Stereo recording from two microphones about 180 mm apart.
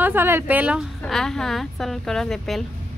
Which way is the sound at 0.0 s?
10° right (ahead or behind).